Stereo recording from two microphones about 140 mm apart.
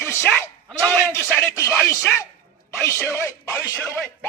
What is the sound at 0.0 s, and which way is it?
A man's voice, 15° left (ahead or behind).